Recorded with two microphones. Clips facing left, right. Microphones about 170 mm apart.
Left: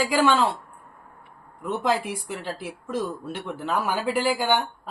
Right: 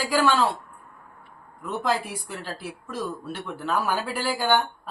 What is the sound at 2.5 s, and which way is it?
Speech, 20° left (ahead or behind).